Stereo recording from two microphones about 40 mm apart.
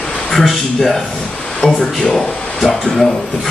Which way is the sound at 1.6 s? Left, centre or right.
Left.